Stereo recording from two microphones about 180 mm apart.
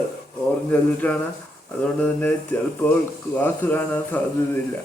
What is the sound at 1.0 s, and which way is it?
Speech, 10° left (ahead or behind).